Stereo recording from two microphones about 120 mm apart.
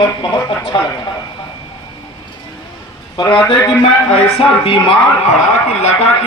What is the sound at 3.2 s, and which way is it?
Speech, 45° left (ahead or behind).